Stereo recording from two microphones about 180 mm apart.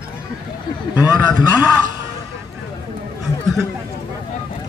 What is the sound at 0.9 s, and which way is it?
Speech, 10° right (ahead or behind).